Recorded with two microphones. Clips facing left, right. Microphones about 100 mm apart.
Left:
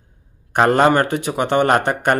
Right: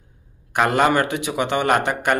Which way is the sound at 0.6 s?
35° left (ahead or behind).